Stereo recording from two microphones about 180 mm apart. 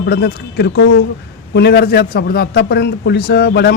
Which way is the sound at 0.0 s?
65° left (ahead or behind).